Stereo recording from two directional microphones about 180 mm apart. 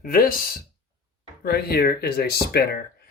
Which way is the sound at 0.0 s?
55° left (ahead or behind).